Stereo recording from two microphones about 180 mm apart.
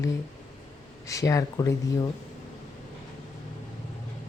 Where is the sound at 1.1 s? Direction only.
20° left (ahead or behind).